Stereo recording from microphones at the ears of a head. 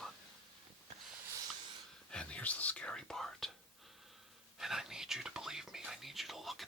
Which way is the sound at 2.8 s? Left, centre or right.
Centre.